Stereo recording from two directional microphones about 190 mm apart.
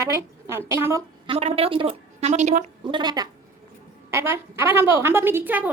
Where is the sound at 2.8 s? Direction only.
25° right (ahead or behind).